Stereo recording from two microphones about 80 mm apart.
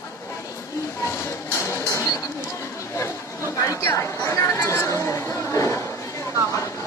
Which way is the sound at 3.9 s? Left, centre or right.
Left.